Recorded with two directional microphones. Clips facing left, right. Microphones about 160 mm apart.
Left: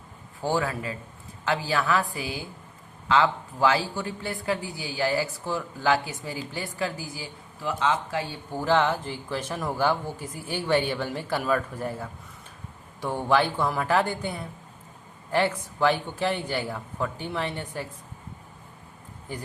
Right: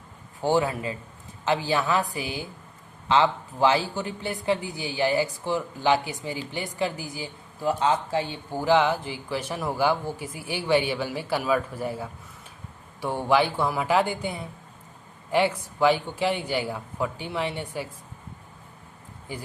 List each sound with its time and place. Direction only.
0.4 s a woman's voice: 20° right (ahead or behind)
7.6 s speech: 35° right (ahead or behind)
8.5 s speech: 10° right (ahead or behind)